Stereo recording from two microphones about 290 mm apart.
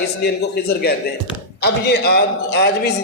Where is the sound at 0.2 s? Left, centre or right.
Left.